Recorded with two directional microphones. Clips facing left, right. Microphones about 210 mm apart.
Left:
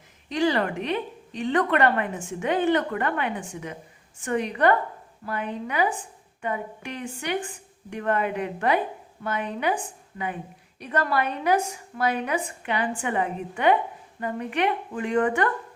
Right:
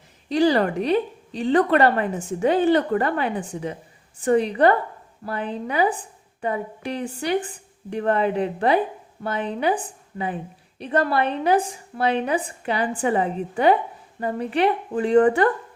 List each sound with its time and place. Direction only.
0.3 s a woman's voice: 35° right (ahead or behind)